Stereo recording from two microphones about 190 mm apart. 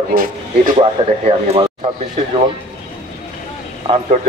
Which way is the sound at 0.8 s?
30° right (ahead or behind).